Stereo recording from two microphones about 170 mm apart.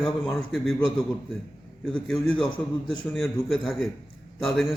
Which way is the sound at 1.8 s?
5° left (ahead or behind).